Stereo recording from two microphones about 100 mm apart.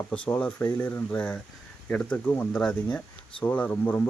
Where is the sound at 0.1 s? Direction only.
10° left (ahead or behind).